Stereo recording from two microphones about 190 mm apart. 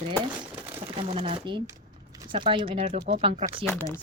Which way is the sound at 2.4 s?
25° right (ahead or behind).